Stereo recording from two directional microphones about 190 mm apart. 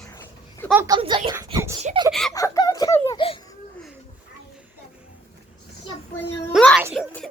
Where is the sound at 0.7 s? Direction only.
20° right (ahead or behind).